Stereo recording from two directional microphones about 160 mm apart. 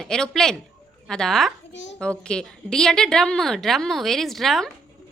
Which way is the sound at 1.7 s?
90° left.